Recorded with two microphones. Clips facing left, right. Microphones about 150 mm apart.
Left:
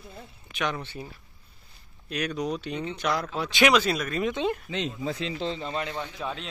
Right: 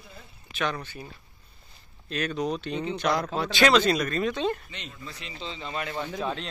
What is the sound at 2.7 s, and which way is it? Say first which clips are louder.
Speech: right 2 dB; 35° right (ahead or behind).